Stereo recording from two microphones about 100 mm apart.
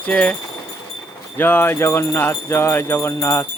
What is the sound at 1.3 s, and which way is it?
Jingle bell, 20° left (ahead or behind).